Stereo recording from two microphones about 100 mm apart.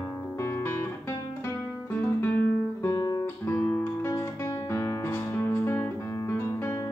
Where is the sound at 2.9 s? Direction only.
35° left (ahead or behind).